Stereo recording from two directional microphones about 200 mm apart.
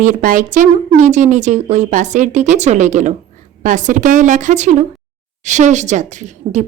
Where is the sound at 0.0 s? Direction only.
40° right (ahead or behind).